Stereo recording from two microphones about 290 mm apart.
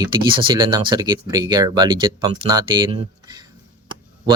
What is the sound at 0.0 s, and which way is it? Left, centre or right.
Speech, centre.